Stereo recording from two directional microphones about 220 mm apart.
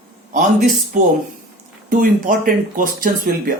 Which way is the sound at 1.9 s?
35° right (ahead or behind).